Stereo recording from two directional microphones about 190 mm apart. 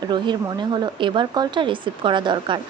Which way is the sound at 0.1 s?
25° right (ahead or behind).